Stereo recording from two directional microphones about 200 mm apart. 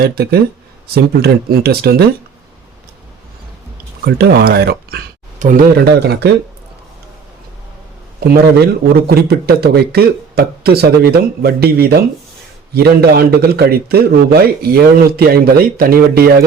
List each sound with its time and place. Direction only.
0.0 s a man's voice: 50° right (ahead or behind)
4.0 s speech: 50° right (ahead or behind)
6.0 s speech: 55° right (ahead or behind)
8.5 s a man's voice: 50° right (ahead or behind)